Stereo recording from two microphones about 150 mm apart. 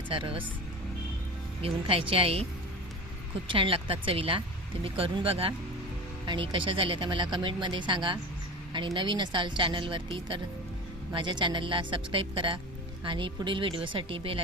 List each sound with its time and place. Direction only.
0.1 s speech: 35° right (ahead or behind)
1.6 s speech: 35° right (ahead or behind)
3.5 s speech: 35° right (ahead or behind)